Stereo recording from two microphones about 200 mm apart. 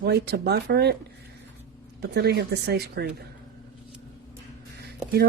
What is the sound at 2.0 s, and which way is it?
Speech, 55° right (ahead or behind).